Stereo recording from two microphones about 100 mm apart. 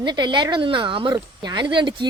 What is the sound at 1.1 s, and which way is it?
Speech, 45° right (ahead or behind).